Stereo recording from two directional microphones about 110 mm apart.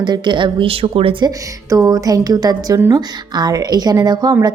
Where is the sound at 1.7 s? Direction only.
30° right (ahead or behind).